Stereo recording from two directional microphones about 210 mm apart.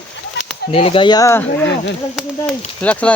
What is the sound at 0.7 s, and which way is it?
Speech, 25° left (ahead or behind).